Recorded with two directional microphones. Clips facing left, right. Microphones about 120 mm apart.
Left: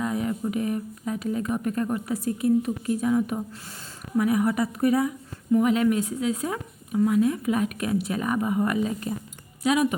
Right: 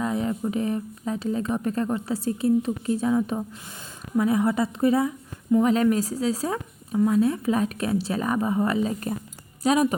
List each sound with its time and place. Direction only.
0.0 s a sound: 25° right (ahead or behind)
0.5 s a woman's voice: 30° right (ahead or behind)
4.2 s a woman's voice: 25° right (ahead or behind)